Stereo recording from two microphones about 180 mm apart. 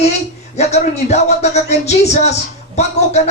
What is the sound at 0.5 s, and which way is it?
A man's voice, 40° left (ahead or behind).